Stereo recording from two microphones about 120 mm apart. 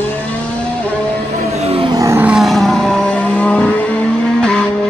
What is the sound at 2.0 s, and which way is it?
Vehicle, 25° right (ahead or behind).